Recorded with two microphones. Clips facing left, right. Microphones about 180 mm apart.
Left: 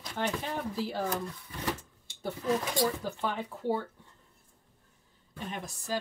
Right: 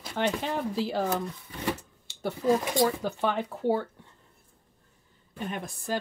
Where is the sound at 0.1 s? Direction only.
80° right.